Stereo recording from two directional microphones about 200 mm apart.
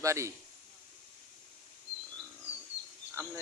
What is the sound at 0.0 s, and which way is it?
Speech, 15° right (ahead or behind).